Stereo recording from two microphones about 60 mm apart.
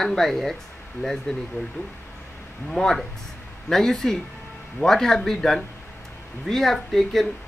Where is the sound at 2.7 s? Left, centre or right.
Centre.